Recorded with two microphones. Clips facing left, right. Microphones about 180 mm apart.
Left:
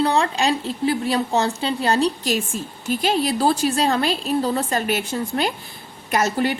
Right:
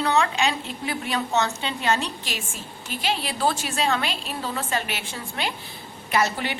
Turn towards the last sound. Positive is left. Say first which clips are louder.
# left 4 dB
turn(degrees=40)  # may be behind; listen again after turning